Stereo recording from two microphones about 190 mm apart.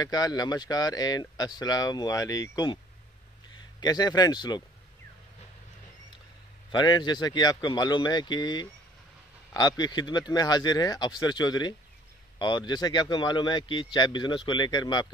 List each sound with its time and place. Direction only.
0.0 s speech: 20° left (ahead or behind)
3.8 s speech: 20° left (ahead or behind)
6.7 s speech: 20° left (ahead or behind)